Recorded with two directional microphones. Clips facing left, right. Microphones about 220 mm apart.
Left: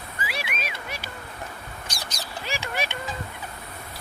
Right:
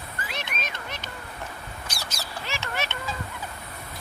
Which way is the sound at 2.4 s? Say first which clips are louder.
Left 2 dB; 10° left (ahead or behind).